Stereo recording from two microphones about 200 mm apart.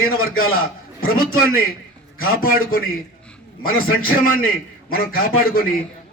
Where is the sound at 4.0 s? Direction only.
45° left (ahead or behind).